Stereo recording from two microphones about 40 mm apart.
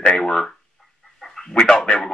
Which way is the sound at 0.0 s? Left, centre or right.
Centre.